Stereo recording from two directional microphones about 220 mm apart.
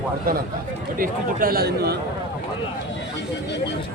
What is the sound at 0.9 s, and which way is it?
A man's voice, 40° right (ahead or behind).